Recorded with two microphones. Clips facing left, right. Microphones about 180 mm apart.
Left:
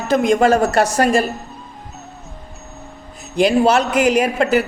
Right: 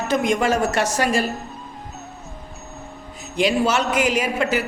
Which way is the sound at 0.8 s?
55° left (ahead or behind).